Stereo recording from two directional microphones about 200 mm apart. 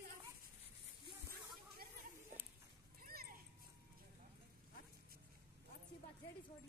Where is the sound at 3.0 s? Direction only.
45° right (ahead or behind).